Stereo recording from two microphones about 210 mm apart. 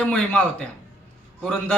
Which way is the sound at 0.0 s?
5° left (ahead or behind).